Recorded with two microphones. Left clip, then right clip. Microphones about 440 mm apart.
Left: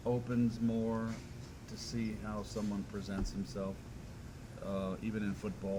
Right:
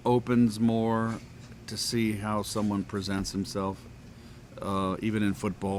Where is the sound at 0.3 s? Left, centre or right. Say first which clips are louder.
Right 10 dB; right.